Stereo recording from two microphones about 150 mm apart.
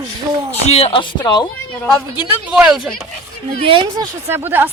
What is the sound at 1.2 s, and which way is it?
Speech, 30° left (ahead or behind).